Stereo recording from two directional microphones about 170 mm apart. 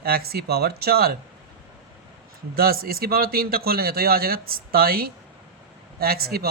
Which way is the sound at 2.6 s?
60° right (ahead or behind).